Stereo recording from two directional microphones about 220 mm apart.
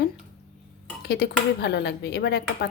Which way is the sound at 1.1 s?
45° left (ahead or behind).